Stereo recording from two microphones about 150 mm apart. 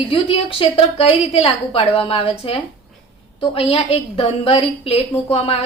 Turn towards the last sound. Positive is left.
turn(degrees=40)  # may be behind; listen again after turning